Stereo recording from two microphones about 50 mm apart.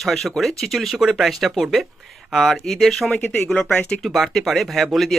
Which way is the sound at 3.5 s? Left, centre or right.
Left.